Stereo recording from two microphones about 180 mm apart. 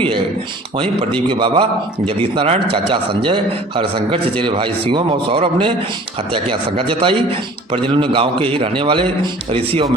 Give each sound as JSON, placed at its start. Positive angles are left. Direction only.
{"t": 1.3, "sound": "a man's voice", "side_deg": -30}